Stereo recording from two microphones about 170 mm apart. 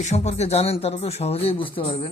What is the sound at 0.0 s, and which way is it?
Speech, 40° left (ahead or behind).